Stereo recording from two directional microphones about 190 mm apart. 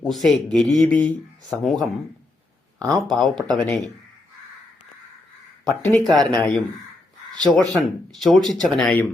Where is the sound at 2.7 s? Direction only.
20° right (ahead or behind).